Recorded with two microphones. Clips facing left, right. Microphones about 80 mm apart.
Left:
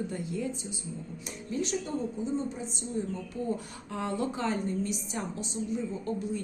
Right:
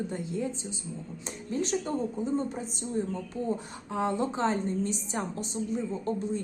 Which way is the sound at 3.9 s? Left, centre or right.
Right.